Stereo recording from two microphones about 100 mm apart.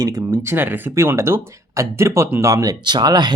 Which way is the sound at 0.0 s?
35° right (ahead or behind).